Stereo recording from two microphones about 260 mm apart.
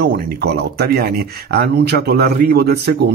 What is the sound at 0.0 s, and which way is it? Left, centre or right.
Speech, right.